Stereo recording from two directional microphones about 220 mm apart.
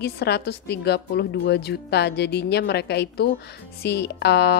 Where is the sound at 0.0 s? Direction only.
45° left (ahead or behind).